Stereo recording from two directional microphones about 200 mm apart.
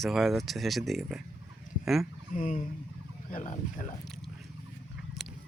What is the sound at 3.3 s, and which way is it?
Speech, 40° left (ahead or behind).